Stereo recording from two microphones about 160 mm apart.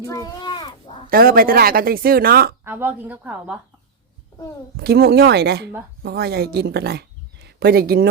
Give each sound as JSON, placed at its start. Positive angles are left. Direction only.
{"t": 0.1, "sound": "a sound", "side_deg": 25}
{"t": 1.1, "sound": "speech", "side_deg": -65}
{"t": 2.6, "sound": "a woman's voice", "side_deg": -10}
{"t": 4.8, "sound": "speech", "side_deg": -85}